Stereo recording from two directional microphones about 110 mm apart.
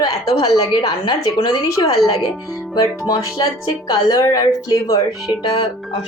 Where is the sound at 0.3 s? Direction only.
35° left (ahead or behind).